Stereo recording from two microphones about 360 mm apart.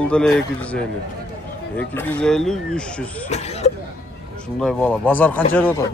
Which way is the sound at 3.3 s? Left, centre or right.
Centre.